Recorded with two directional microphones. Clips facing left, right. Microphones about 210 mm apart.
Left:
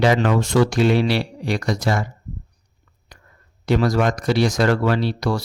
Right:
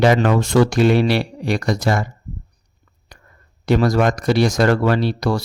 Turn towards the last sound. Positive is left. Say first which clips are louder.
# right 2 dB
turn(degrees=-50)  # may be behind; listen again after turning